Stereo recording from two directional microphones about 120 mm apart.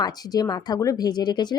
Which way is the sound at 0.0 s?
35° left (ahead or behind).